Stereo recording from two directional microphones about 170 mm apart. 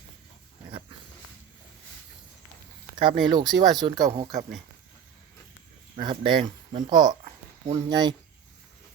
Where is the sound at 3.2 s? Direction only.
25° right (ahead or behind).